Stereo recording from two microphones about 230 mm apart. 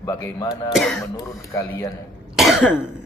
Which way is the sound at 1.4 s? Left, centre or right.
Centre.